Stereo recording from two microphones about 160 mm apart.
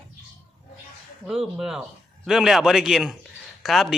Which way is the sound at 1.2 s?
5° right (ahead or behind).